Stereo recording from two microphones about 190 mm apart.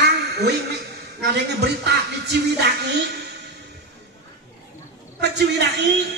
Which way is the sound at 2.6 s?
60° right (ahead or behind).